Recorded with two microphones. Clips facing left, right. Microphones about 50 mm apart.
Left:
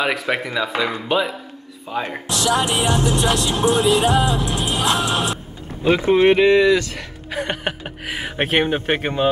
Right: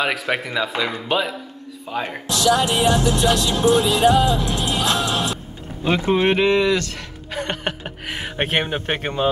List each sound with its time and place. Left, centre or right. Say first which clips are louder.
0.0 s speech: left 1 dB; centre
1.9 s speech: left 1 dB; centre
2.2 s music: right 2 dB; left
5.9 s speech: left 4 dB; centre